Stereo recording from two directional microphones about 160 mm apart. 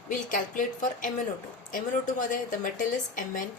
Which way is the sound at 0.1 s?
55° left (ahead or behind).